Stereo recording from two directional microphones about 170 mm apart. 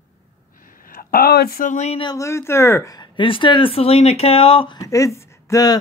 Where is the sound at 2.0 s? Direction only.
20° left (ahead or behind).